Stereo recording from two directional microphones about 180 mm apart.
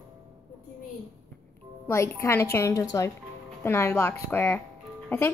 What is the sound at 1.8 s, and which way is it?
Speech, 15° left (ahead or behind).